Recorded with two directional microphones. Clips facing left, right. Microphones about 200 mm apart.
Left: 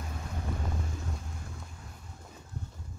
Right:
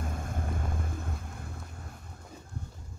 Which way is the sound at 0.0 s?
50° right (ahead or behind).